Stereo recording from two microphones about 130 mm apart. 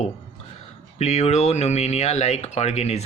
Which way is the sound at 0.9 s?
60° left (ahead or behind).